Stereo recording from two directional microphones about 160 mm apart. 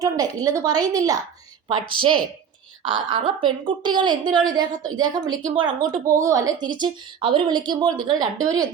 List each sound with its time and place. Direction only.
0.0 s a woman's voice: 25° right (ahead or behind)